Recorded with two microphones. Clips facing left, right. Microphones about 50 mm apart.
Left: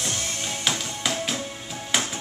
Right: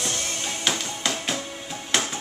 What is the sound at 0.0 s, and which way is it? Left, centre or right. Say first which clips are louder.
Music: right 1 dB; centre.